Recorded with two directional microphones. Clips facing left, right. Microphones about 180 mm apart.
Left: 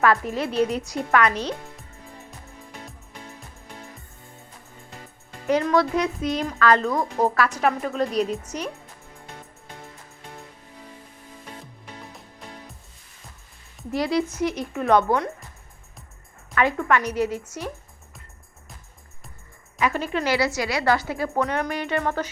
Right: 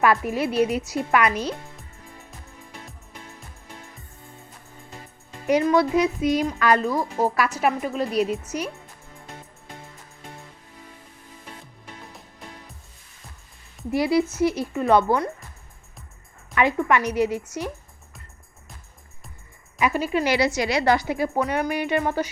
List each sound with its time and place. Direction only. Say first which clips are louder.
0.0 s speech: right 1 dB; 10° right (ahead or behind)
5.5 s speech: right 2 dB; 15° right (ahead or behind)
13.9 s speech: right 3 dB; 10° right (ahead or behind)
16.6 s speech: right 1 dB; 15° right (ahead or behind)
19.8 s speech: right 2 dB; 5° right (ahead or behind)
20.2 s speech: left 1 dB; 20° right (ahead or behind)